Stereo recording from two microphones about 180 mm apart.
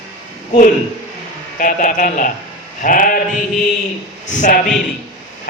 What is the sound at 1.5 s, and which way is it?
A man's voice, 50° left (ahead or behind).